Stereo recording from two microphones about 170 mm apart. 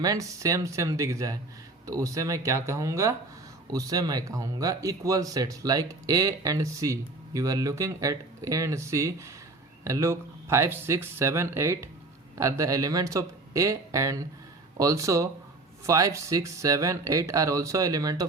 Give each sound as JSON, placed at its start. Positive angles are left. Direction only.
{"t": 0.0, "sound": "speech", "side_deg": -20}